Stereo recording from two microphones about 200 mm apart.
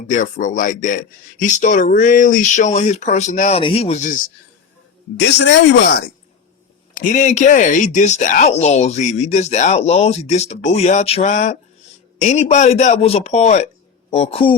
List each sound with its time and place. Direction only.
0.1 s speech: 40° left (ahead or behind)
5.2 s speech: 60° left (ahead or behind)
6.9 s speech: 40° left (ahead or behind)